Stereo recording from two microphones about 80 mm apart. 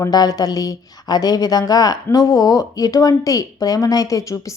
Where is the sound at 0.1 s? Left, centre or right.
Left.